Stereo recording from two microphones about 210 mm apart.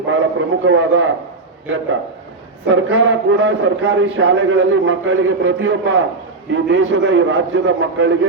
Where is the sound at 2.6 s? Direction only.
65° right (ahead or behind).